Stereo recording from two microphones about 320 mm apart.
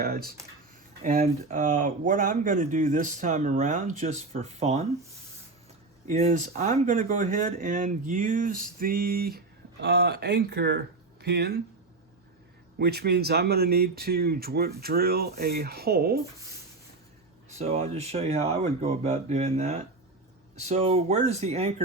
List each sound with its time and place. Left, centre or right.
0.0 s speech: right
6.1 s speech: right
12.8 s speech: right
17.6 s speech: right